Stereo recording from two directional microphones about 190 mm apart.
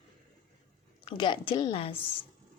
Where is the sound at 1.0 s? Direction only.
25° left (ahead or behind).